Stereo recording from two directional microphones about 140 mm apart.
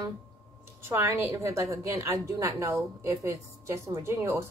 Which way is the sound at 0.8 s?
20° right (ahead or behind).